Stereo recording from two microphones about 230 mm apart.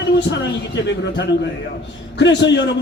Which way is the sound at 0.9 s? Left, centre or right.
Left.